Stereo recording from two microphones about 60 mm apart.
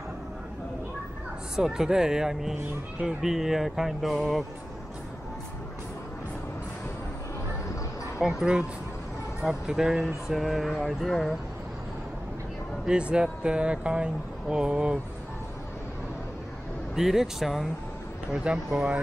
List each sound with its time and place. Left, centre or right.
1.6 s speech: centre
8.2 s speech: centre
12.8 s speech: centre
16.9 s speech: centre
18.3 s speech: centre